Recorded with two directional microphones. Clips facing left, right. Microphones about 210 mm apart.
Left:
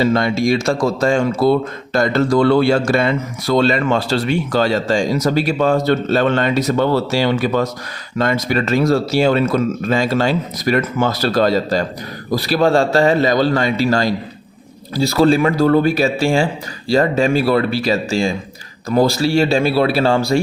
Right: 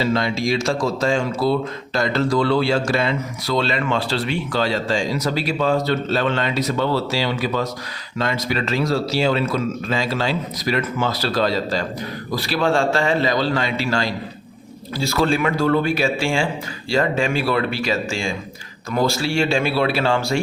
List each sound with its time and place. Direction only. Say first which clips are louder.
0.0 s a man's voice: left 5 dB; 50° left (ahead or behind)